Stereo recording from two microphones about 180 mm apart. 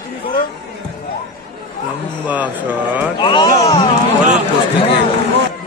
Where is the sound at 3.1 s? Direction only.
25° left (ahead or behind).